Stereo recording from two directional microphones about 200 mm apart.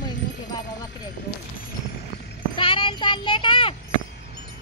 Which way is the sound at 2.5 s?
25° left (ahead or behind).